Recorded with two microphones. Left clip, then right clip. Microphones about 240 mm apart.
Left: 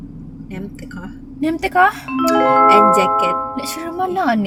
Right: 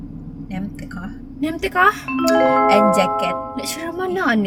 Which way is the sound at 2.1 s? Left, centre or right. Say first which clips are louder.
Left 1 dB; centre.